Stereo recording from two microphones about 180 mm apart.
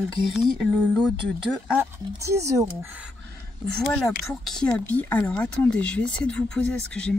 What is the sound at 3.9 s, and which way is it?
Speech, 15° left (ahead or behind).